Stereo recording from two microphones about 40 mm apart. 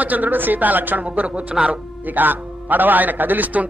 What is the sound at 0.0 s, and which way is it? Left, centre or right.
A man's voice, right.